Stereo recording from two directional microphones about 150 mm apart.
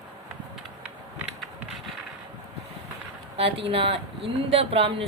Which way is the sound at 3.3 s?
40° right (ahead or behind).